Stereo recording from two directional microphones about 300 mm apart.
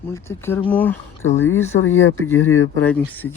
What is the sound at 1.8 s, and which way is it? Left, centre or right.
Speech, left.